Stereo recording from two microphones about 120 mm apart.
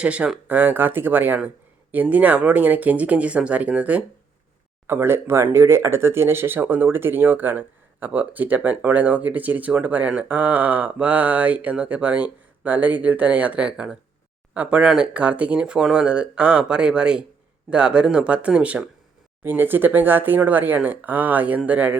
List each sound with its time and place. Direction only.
0.0 s speech: 10° right (ahead or behind)